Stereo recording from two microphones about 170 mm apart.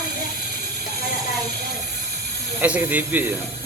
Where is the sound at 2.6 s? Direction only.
10° right (ahead or behind).